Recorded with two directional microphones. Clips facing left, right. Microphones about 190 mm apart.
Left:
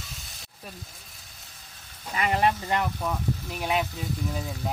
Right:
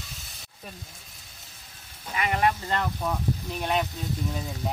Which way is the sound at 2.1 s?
35° left (ahead or behind).